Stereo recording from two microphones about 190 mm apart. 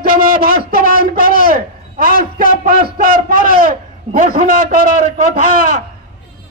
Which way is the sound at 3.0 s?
50° right (ahead or behind).